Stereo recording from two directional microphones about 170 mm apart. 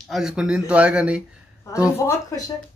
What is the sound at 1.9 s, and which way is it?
Speech, 15° left (ahead or behind).